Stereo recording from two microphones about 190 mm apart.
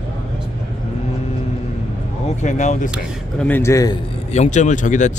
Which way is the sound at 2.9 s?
5° left (ahead or behind).